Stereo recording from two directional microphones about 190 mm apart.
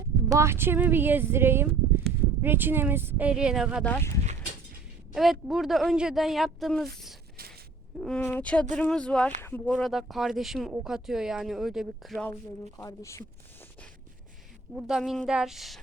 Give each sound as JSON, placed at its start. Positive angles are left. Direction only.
{"t": 0.3, "sound": "speech", "side_deg": -15}
{"t": 3.9, "sound": "speech", "side_deg": 10}
{"t": 5.1, "sound": "speech", "side_deg": 0}
{"t": 7.9, "sound": "speech", "side_deg": 5}
{"t": 12.7, "sound": "speech", "side_deg": 15}
{"t": 14.8, "sound": "speech", "side_deg": -5}